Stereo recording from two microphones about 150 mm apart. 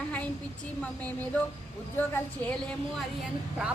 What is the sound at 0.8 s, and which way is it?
A woman's voice, 10° left (ahead or behind).